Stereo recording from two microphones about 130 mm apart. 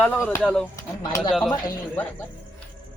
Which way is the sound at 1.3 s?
Centre (ahead or behind).